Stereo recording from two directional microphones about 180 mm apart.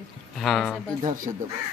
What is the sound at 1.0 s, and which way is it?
Speech, 45° right (ahead or behind).